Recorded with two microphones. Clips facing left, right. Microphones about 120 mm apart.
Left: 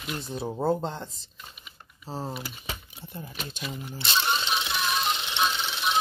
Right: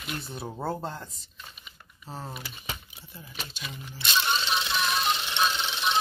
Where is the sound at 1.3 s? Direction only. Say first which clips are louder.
Even; 5° left (ahead or behind).